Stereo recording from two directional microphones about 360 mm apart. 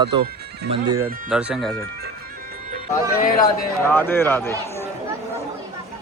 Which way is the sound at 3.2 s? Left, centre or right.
Left.